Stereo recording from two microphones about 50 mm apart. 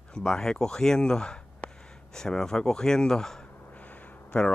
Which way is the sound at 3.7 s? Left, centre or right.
Left.